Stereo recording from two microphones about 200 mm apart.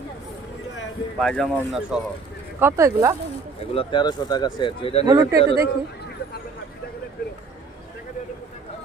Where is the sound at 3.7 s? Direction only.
20° left (ahead or behind).